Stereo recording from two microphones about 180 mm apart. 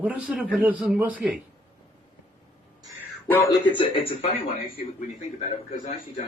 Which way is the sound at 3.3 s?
15° left (ahead or behind).